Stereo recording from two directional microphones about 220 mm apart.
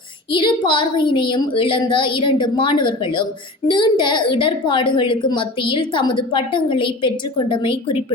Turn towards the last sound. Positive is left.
turn(degrees=25)  # may be behind; listen again after turning